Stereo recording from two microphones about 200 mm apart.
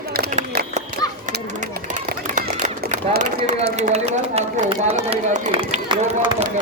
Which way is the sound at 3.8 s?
35° right (ahead or behind).